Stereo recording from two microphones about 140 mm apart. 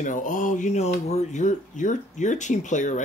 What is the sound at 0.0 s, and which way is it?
Speech, 65° left (ahead or behind).